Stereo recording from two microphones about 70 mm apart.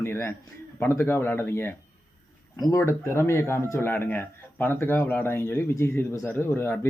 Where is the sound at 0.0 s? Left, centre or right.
Left.